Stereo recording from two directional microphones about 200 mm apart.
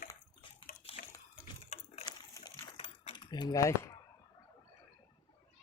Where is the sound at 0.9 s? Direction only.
30° left (ahead or behind).